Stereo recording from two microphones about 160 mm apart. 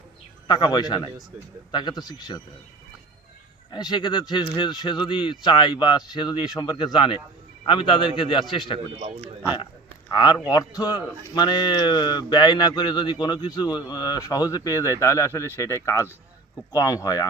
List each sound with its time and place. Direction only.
0.4 s speech: 25° left (ahead or behind)
3.7 s a man's voice: 25° left (ahead or behind)
10.1 s speech: 25° left (ahead or behind)